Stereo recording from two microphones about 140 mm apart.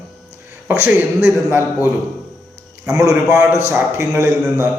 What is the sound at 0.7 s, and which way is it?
A man's voice, 10° right (ahead or behind).